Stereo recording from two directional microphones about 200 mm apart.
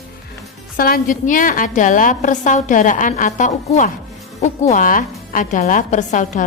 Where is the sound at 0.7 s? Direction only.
45° left (ahead or behind).